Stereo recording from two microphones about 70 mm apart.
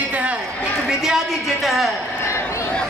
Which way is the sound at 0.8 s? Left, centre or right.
Centre.